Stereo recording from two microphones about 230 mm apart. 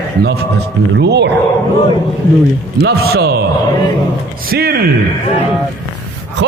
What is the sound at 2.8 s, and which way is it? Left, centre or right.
Speech, right.